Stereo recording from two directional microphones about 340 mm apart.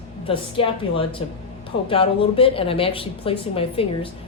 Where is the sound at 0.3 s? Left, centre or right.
Centre.